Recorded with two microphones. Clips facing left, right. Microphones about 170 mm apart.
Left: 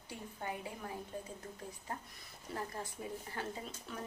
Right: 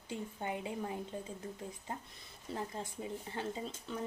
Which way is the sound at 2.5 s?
20° right (ahead or behind).